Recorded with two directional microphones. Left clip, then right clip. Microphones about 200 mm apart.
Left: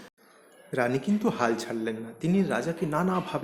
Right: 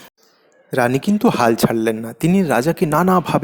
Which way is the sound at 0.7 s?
40° right (ahead or behind).